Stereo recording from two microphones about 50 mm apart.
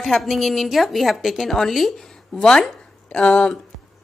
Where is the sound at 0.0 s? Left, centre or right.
Centre.